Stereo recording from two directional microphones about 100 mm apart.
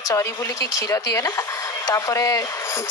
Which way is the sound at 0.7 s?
40° left (ahead or behind).